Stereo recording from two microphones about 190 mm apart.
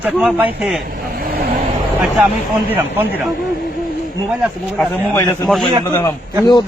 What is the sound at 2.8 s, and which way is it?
Speech, 10° right (ahead or behind).